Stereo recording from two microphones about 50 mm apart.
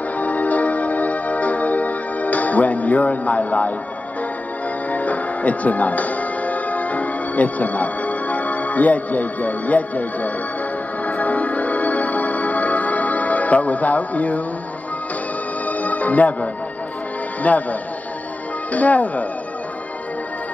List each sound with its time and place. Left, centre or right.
0.2 s music: left
4.9 s music: left
15.6 s music: left
17.4 s speech: left